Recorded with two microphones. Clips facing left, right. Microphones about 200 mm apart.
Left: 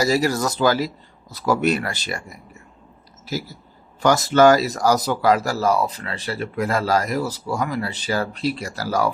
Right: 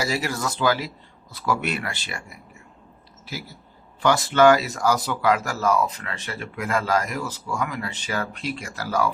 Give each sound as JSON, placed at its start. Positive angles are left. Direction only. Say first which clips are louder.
{"t": 0.0, "sound": "speech", "louder": "left 7 dB", "side_deg": 40}